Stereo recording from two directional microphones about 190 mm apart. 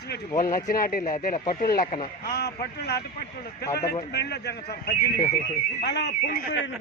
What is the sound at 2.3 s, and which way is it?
A man's voice, 60° left (ahead or behind).